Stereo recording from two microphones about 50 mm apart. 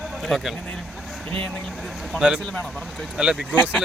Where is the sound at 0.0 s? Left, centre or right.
Centre.